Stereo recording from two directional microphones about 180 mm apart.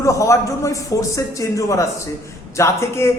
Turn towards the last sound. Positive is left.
turn(degrees=15)  # may be behind; listen again after turning